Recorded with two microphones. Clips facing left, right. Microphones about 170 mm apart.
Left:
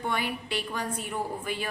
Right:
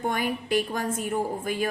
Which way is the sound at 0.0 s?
45° right (ahead or behind).